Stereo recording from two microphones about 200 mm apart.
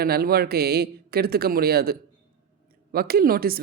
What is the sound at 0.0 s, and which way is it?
Speech, 50° right (ahead or behind).